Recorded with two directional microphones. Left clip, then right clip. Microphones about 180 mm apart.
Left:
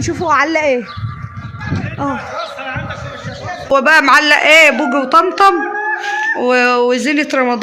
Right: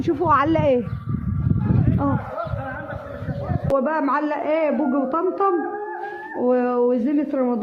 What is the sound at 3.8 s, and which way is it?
A man's voice, 25° left (ahead or behind).